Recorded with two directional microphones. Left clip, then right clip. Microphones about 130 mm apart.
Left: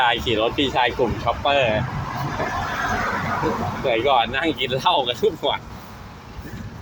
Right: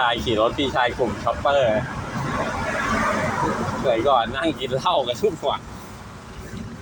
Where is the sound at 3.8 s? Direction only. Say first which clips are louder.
Even; 15° left (ahead or behind).